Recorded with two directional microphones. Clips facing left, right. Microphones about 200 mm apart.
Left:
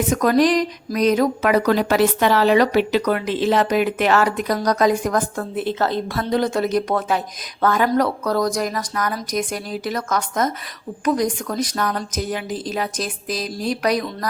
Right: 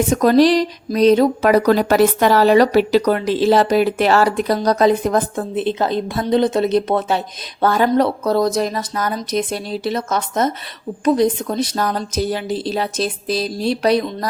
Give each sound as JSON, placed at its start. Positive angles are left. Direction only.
{"t": 0.1, "sound": "speech", "side_deg": -30}